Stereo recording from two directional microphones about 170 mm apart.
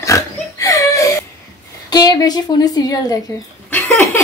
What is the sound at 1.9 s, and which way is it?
A woman's voice, 20° left (ahead or behind).